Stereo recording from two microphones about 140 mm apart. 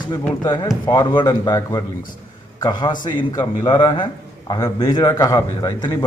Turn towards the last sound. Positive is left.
turn(degrees=30)  # may be behind; listen again after turning